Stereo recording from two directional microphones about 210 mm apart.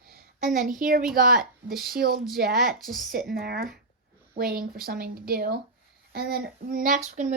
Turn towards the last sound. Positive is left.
turn(degrees=-35)  # may be behind; listen again after turning